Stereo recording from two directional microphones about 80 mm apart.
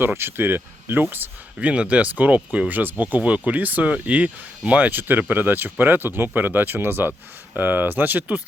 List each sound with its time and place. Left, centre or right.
0.0 s speech: right
1.5 s speech: centre